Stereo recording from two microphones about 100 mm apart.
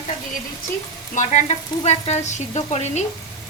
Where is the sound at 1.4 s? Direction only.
90° left.